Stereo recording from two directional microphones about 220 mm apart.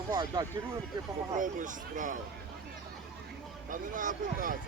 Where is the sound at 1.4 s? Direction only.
35° right (ahead or behind).